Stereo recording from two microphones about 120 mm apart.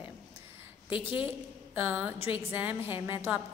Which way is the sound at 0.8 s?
45° left (ahead or behind).